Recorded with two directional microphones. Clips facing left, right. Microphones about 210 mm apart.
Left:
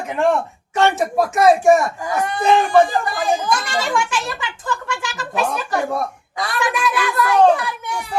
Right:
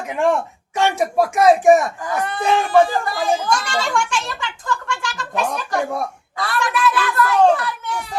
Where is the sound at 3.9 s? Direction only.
5° left (ahead or behind).